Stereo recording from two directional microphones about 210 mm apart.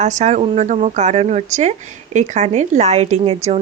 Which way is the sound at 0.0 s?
35° right (ahead or behind).